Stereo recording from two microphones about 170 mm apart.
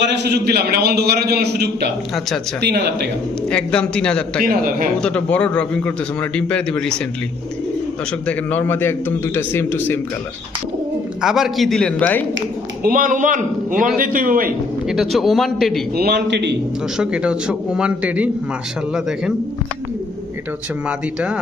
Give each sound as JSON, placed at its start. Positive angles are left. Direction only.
{"t": 0.0, "sound": "a man's voice", "side_deg": -90}
{"t": 3.5, "sound": "a man's voice", "side_deg": 5}
{"t": 4.4, "sound": "a man's voice", "side_deg": -55}
{"t": 5.0, "sound": "a man's voice", "side_deg": 5}
{"t": 8.3, "sound": "a man's voice", "side_deg": 10}
{"t": 11.2, "sound": "a man's voice", "side_deg": 0}
{"t": 12.8, "sound": "a man's voice", "side_deg": -55}
{"t": 14.8, "sound": "a man's voice", "side_deg": 0}
{"t": 16.0, "sound": "a man's voice", "side_deg": -75}
{"t": 17.0, "sound": "a man's voice", "side_deg": -5}
{"t": 20.8, "sound": "a man's voice", "side_deg": -5}